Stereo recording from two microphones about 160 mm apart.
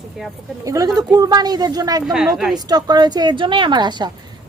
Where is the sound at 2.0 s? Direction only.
5° right (ahead or behind).